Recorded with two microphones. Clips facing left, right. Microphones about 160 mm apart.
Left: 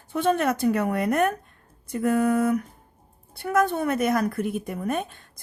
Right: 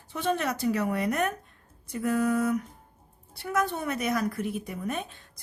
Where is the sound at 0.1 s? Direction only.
55° left (ahead or behind).